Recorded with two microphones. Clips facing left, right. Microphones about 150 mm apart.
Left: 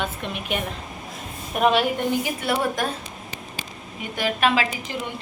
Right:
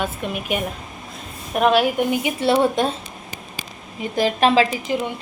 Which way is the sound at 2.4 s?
25° right (ahead or behind).